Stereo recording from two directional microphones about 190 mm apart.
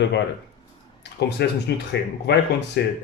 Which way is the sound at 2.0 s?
60° left (ahead or behind).